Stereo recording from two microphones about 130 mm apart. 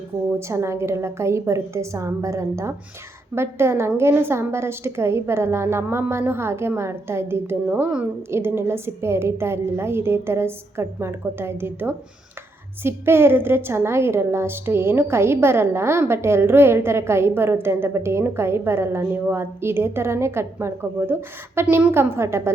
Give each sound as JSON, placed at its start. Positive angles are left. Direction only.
{"t": 0.3, "sound": "a woman's voice", "side_deg": -20}